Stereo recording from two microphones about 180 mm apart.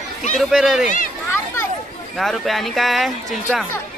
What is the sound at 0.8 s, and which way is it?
Speech, 45° left (ahead or behind).